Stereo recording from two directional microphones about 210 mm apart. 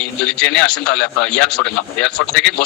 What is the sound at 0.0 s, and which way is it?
A man's voice, 5° left (ahead or behind).